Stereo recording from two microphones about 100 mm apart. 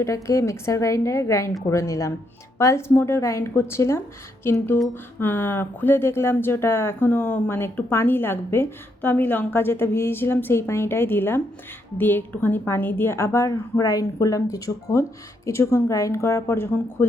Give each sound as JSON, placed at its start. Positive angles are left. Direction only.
{"t": 0.0, "sound": "a woman's voice", "side_deg": 30}